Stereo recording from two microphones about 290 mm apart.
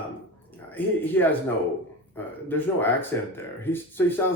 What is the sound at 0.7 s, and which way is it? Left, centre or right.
Speech, centre.